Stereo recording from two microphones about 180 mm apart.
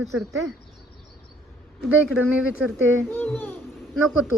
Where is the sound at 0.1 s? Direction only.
90° right.